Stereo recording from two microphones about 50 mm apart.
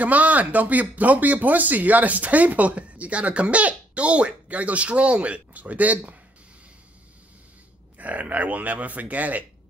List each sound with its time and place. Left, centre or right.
0.0 s speech: right
8.0 s speech: right